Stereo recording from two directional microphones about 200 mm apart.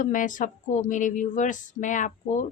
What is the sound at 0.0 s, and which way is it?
A woman's voice, 40° left (ahead or behind).